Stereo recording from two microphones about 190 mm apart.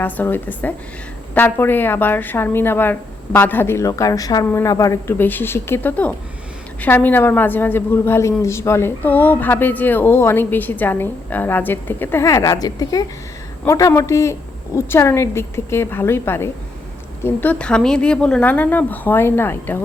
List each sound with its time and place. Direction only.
0.0 s a woman's voice: 10° left (ahead or behind)